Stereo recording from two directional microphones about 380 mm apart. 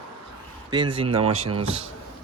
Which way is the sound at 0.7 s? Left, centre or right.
Centre.